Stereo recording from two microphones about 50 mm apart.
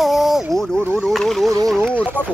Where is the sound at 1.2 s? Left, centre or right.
Centre.